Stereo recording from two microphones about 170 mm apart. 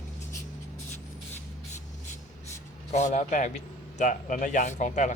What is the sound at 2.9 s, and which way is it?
Speech, 45° left (ahead or behind).